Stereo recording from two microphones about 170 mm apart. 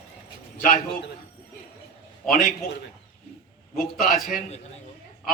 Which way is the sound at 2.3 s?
55° left (ahead or behind).